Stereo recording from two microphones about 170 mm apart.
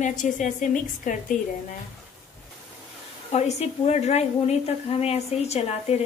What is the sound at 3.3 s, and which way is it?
A woman's voice, 35° left (ahead or behind).